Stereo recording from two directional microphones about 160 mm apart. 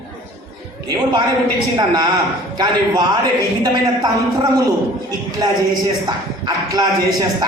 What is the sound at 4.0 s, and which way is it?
A man's voice, 25° right (ahead or behind).